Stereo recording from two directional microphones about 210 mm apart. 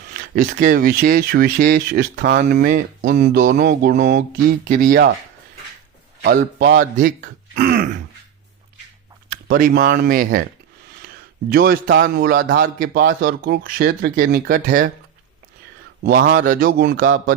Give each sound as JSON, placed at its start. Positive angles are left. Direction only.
{"t": 0.1, "sound": "a man's voice", "side_deg": -45}
{"t": 6.6, "sound": "speech", "side_deg": -45}
{"t": 9.3, "sound": "speech", "side_deg": -40}
{"t": 11.4, "sound": "a man's voice", "side_deg": -45}
{"t": 16.0, "sound": "a man's voice", "side_deg": -45}